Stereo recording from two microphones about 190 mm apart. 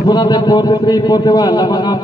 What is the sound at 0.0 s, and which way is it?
A man's voice, 20° left (ahead or behind).